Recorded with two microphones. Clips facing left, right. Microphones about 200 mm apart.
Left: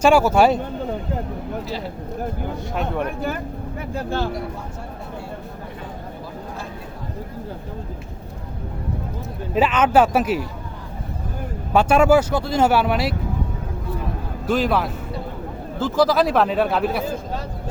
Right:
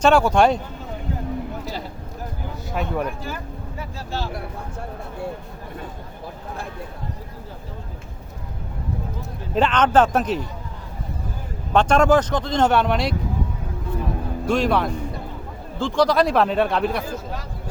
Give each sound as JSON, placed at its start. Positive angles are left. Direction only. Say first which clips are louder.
{"t": 0.0, "sound": "speech", "louder": "left 1 dB", "side_deg": 5}
{"t": 3.8, "sound": "speech", "louder": "left 6 dB", "side_deg": 55}
{"t": 9.6, "sound": "speech", "louder": "left 1 dB", "side_deg": 5}
{"t": 11.7, "sound": "speech", "louder": "left 1 dB", "side_deg": 5}
{"t": 14.4, "sound": "speech", "louder": "even", "side_deg": 0}
{"t": 17.0, "sound": "a man's voice", "louder": "left 3 dB", "side_deg": 25}